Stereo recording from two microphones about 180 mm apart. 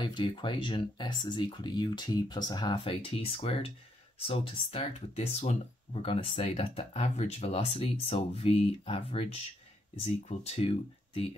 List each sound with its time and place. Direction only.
0.0 s speech: 25° left (ahead or behind)